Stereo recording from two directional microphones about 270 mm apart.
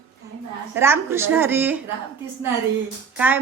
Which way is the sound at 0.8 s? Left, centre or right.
Centre.